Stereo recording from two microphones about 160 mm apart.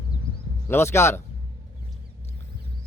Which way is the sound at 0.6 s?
15° left (ahead or behind).